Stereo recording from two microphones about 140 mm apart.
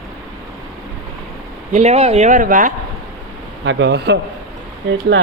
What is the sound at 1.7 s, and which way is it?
Speech, 50° right (ahead or behind).